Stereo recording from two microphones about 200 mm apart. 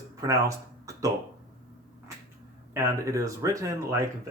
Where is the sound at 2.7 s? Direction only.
15° right (ahead or behind).